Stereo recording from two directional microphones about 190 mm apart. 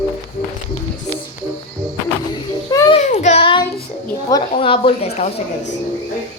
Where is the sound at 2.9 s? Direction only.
35° left (ahead or behind).